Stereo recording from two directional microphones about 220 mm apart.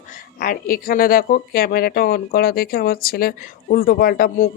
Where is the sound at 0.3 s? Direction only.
40° left (ahead or behind).